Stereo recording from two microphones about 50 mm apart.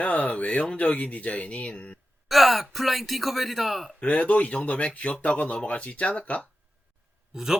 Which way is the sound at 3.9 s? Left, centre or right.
Left.